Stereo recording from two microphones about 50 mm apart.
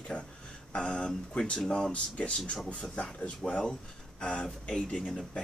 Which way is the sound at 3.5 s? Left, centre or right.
Centre.